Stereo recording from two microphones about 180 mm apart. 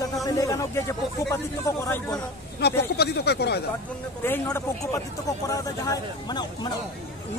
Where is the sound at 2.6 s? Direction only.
65° left (ahead or behind).